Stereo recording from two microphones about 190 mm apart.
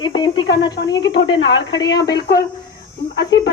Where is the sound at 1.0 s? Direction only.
70° left (ahead or behind).